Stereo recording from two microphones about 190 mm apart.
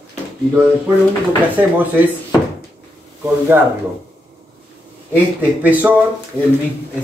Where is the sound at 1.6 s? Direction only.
10° right (ahead or behind).